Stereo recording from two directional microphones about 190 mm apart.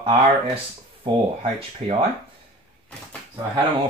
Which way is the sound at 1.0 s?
30° right (ahead or behind).